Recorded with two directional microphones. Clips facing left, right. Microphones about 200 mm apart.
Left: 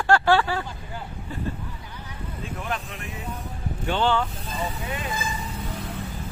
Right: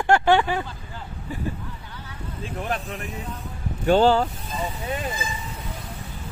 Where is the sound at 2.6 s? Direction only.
40° right (ahead or behind).